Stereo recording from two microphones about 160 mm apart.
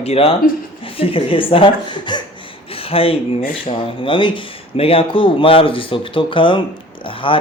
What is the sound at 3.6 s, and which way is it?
Speech, 30° left (ahead or behind).